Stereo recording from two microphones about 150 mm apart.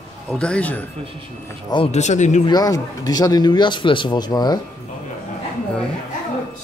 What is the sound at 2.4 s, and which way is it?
Speech, 25° left (ahead or behind).